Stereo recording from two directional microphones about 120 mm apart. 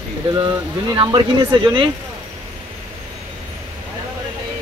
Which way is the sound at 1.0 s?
40° right (ahead or behind).